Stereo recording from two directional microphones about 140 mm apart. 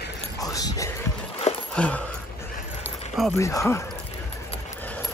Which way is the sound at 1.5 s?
50° left (ahead or behind).